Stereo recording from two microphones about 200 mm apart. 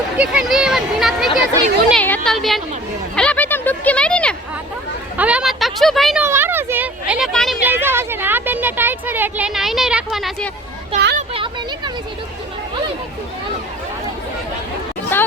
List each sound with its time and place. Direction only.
0.2 s speech: 5° right (ahead or behind)
3.2 s a sound: 5° left (ahead or behind)
5.1 s speech: 5° right (ahead or behind)
6.2 s speech: 10° right (ahead or behind)
7.7 s a woman's voice: 10° right (ahead or behind)
10.9 s speech: 35° right (ahead or behind)
15.1 s a woman's voice: 10° left (ahead or behind)